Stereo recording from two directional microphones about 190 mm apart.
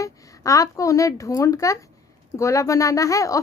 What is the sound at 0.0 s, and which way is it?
A woman's voice, 15° left (ahead or behind).